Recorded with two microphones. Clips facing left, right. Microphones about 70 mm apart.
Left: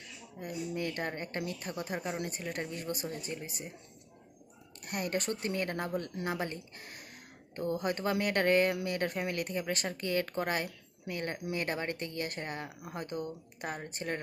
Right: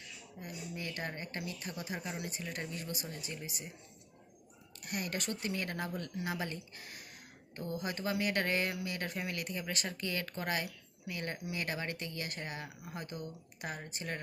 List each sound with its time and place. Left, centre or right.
0.3 s speech: left
4.8 s speech: left